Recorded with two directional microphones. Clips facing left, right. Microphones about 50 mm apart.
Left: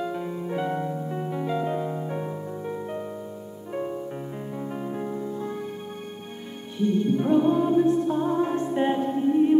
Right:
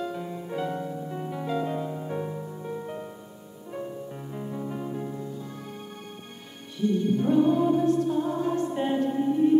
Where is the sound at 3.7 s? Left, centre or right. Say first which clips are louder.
Left 5 dB; left.